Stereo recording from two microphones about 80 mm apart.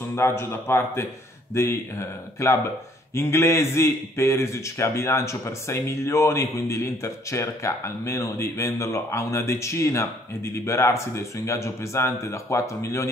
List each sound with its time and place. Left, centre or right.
0.1 s a man's voice: left